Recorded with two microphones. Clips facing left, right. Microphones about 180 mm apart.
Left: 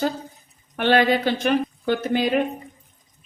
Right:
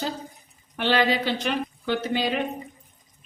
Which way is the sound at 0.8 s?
55° left (ahead or behind).